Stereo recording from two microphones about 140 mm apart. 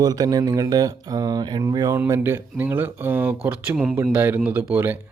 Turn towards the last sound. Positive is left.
turn(degrees=-15)  # may be behind; listen again after turning